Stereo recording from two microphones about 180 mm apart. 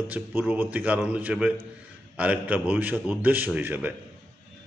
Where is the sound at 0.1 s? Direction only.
10° right (ahead or behind).